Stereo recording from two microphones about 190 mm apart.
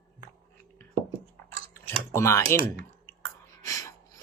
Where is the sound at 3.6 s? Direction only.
15° left (ahead or behind).